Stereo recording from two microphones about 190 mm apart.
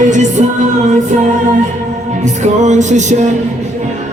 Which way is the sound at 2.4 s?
40° right (ahead or behind).